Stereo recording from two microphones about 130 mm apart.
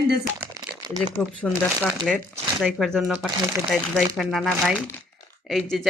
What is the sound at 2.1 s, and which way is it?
Speech, centre (ahead or behind).